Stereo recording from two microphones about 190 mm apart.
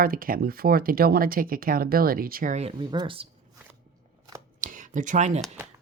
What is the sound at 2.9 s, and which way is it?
Speech, 25° right (ahead or behind).